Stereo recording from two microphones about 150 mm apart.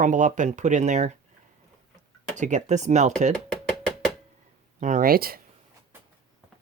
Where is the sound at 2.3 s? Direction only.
55° right (ahead or behind).